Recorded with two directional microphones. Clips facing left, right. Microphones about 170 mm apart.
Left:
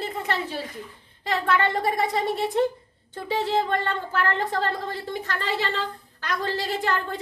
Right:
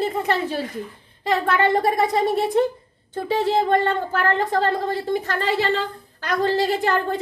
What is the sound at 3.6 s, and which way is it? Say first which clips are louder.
A woman's voice: right 7 dB; 45° right (ahead or behind).